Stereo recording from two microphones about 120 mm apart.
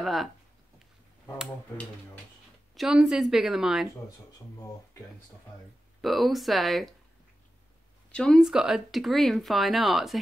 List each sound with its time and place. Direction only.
0.0 s speech: centre (ahead or behind)
2.7 s speech: 5° right (ahead or behind)
5.9 s speech: centre (ahead or behind)
8.1 s speech: 5° left (ahead or behind)